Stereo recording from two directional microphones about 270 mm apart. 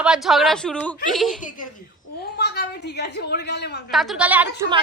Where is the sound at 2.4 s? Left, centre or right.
Left.